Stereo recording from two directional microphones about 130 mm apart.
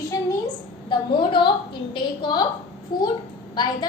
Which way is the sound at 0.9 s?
40° left (ahead or behind).